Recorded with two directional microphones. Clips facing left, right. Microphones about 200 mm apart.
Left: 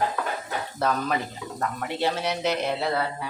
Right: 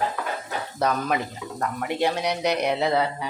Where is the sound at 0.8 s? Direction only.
15° right (ahead or behind).